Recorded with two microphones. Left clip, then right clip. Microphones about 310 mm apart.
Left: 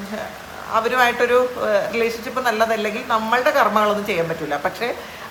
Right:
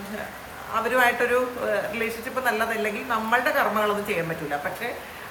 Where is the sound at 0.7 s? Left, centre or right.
Centre.